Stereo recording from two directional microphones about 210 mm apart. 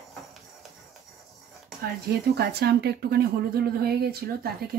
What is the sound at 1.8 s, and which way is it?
Speech, 50° right (ahead or behind).